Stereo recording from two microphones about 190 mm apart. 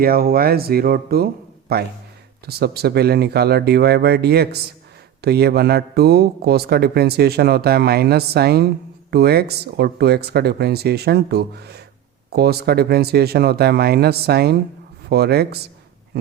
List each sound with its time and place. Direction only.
0.0 s a man's voice: 50° right (ahead or behind)